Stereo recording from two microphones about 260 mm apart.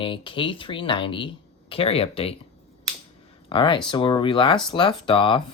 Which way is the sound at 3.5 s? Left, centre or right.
Centre.